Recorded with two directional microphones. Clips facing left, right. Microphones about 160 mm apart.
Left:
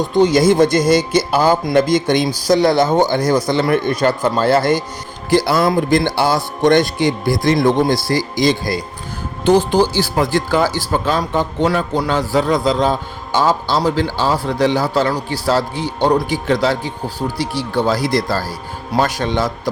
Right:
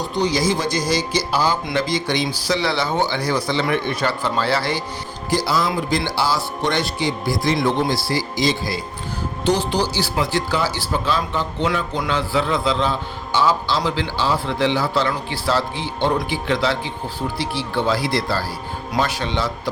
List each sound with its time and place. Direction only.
0.1 s speech: 50° left (ahead or behind)